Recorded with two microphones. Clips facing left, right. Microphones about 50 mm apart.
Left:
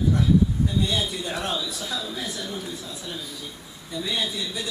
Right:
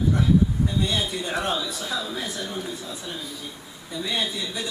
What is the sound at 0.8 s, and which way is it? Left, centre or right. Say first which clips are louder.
A man's voice: even; centre.